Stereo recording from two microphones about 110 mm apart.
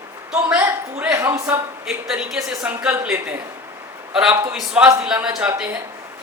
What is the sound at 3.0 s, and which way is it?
Speech, 15° right (ahead or behind).